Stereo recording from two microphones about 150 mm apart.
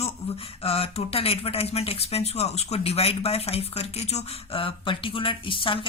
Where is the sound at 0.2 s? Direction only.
45° left (ahead or behind).